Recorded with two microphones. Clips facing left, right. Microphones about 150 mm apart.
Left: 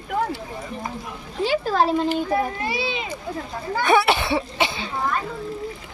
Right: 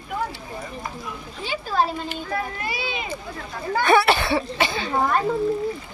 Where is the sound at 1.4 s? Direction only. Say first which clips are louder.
Left 4 dB; 90° left.